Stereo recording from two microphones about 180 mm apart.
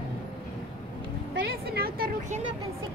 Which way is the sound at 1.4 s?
60° right (ahead or behind).